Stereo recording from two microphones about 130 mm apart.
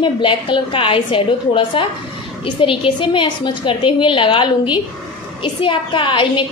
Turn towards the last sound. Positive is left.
turn(degrees=40)  # may be behind; listen again after turning